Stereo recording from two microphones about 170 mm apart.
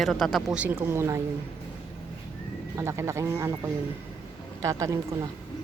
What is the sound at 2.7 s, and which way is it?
Speech, 15° right (ahead or behind).